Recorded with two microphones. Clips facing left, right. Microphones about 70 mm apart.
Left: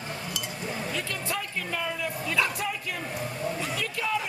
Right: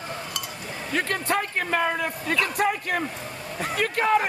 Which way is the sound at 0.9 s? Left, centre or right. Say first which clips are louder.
Right 7 dB; right.